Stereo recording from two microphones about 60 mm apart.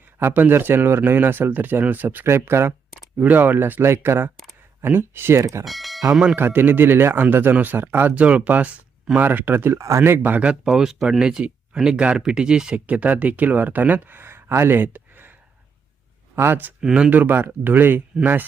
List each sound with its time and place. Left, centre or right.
0.2 s speech: right
2.2 s speech: right
3.2 s speech: right
5.6 s speech: centre
6.3 s speech: right
8.1 s speech: right
9.7 s speech: right
10.0 s speech: right
10.3 s speech: centre; by 16.7 s right
16.8 s speech: centre
17.1 s speech: right